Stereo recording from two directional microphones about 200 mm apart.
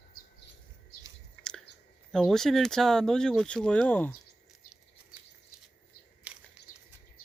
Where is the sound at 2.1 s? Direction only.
Centre (ahead or behind).